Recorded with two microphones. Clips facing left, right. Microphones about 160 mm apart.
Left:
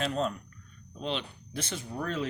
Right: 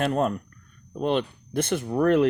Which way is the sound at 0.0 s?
55° right (ahead or behind).